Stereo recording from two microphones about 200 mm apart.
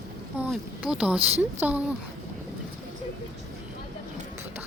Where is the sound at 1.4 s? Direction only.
10° right (ahead or behind).